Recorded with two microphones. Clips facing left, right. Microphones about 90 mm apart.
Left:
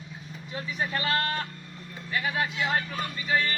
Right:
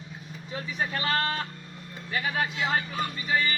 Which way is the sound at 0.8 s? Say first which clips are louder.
Even; 30° right (ahead or behind).